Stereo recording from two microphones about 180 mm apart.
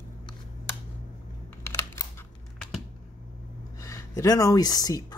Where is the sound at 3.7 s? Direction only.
20° left (ahead or behind).